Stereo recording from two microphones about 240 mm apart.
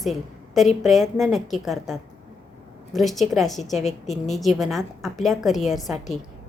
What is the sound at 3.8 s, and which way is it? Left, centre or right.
Speech, left.